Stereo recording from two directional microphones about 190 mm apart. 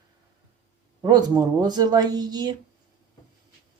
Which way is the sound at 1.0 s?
20° right (ahead or behind).